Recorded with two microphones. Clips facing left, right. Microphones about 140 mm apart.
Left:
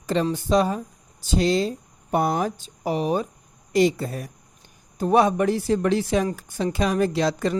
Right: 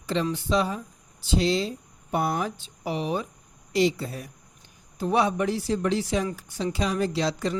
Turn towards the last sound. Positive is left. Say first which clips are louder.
# left 4 dB
turn(degrees=50)  # may be behind; listen again after turning